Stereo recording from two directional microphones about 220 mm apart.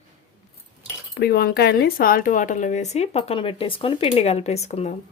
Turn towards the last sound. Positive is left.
turn(degrees=30)  # may be behind; listen again after turning